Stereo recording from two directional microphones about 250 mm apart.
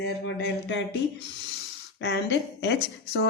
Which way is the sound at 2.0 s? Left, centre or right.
Left.